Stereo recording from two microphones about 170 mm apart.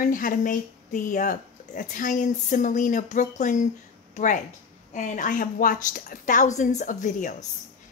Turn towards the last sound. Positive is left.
turn(degrees=45)  # may be behind; listen again after turning